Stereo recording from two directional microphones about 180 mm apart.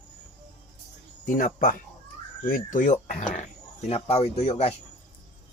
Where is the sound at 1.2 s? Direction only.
50° left (ahead or behind).